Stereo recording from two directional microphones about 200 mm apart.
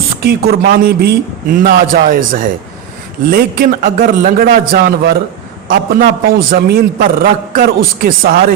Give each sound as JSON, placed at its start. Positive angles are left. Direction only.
{"t": 0.3, "sound": "a man's voice", "side_deg": -50}